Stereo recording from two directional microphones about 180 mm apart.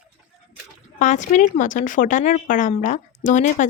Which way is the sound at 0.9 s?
45° left (ahead or behind).